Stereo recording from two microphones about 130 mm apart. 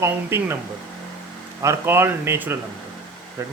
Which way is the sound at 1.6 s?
20° right (ahead or behind).